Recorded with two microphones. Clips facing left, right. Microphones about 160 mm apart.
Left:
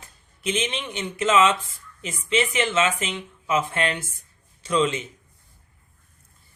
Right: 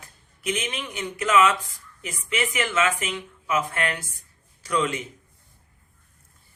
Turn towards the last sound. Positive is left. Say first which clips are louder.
# left 3 dB
turn(degrees=25)  # may be behind; listen again after turning